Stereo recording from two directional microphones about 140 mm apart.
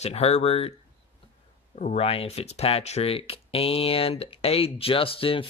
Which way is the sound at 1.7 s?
60° left (ahead or behind).